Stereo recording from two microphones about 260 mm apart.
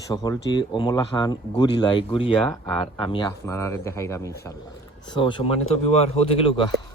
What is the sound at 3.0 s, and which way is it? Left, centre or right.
Speech, centre.